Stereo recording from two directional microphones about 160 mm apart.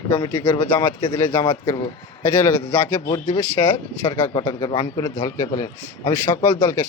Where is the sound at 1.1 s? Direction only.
15° left (ahead or behind).